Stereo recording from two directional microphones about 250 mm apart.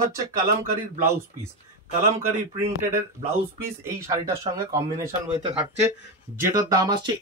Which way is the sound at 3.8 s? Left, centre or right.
Centre.